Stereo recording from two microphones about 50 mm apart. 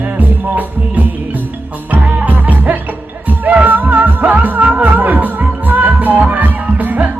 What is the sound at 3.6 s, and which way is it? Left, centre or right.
Music, right.